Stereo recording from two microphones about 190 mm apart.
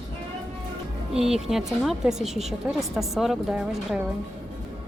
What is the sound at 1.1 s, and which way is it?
Speech, centre (ahead or behind).